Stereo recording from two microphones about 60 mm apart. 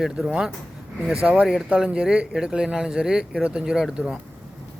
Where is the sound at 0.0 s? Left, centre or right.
Centre.